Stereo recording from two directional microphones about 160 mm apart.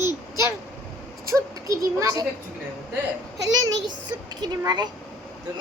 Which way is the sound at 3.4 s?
25° right (ahead or behind).